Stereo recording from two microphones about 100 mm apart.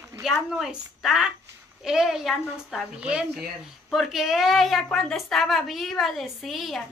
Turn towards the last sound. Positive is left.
turn(degrees=0)  # may be behind; listen again after turning